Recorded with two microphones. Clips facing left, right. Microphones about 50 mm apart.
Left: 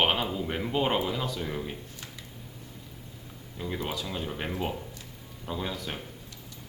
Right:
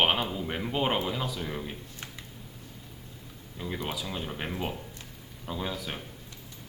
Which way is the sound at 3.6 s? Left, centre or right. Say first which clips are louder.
Left 1 dB; centre.